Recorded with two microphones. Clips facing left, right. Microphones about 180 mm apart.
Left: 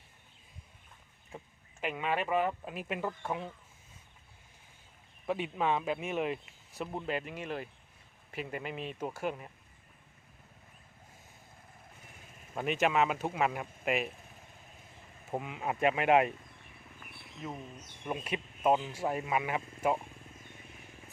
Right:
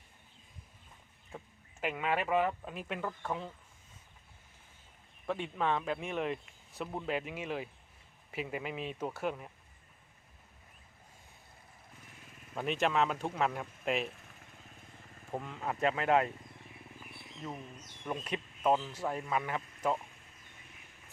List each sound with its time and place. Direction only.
1.8 s speech: centre (ahead or behind)
5.2 s speech: 10° left (ahead or behind)
12.5 s speech: 5° left (ahead or behind)
15.3 s speech: 10° left (ahead or behind)
17.4 s speech: 5° left (ahead or behind)